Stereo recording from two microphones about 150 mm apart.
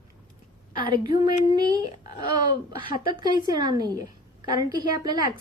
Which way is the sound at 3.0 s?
25° right (ahead or behind).